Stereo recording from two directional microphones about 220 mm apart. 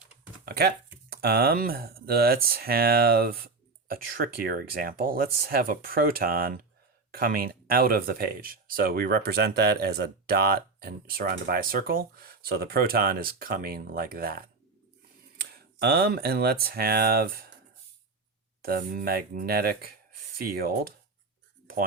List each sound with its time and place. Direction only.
0.4 s speech: 45° right (ahead or behind)
15.5 s speech: 45° right (ahead or behind)
18.6 s speech: 40° right (ahead or behind)